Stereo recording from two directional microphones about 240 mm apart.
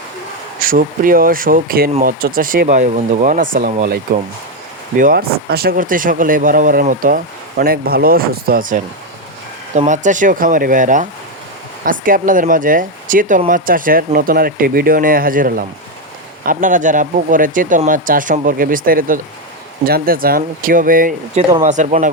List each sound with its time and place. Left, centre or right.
0.6 s speech: right